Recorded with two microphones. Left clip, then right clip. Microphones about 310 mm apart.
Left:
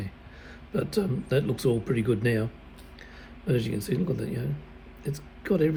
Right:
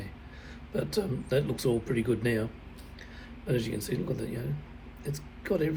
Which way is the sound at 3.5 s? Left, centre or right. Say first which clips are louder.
Left 3 dB; centre.